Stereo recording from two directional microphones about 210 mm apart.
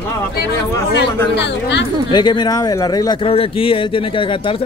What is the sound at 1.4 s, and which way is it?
Speech, 55° left (ahead or behind).